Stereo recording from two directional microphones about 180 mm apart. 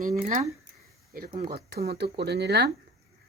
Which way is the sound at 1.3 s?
35° right (ahead or behind).